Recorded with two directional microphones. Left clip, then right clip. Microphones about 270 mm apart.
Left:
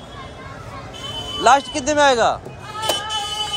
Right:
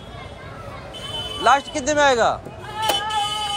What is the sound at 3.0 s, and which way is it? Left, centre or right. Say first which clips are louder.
Music: right 1 dB; right.